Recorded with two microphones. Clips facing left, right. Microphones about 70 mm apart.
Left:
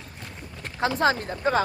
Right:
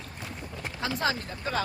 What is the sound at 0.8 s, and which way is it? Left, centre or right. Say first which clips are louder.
Speech: left 7 dB; left.